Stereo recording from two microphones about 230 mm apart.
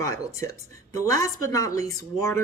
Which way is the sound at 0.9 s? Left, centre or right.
Centre.